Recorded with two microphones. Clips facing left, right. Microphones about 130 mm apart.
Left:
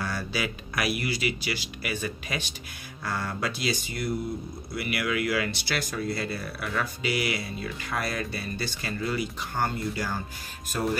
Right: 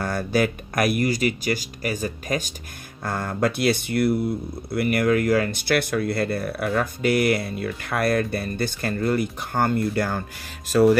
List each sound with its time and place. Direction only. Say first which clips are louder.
0.0 s speech: right 8 dB; 50° right (ahead or behind)
4.7 s speech: right 9 dB; 45° right (ahead or behind)
10.7 s music: right 12 dB; 90° right